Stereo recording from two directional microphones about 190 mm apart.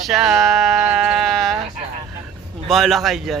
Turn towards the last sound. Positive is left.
turn(degrees=0)  # may be behind; listen again after turning